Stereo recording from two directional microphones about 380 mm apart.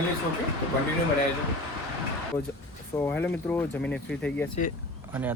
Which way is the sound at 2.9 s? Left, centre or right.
Centre.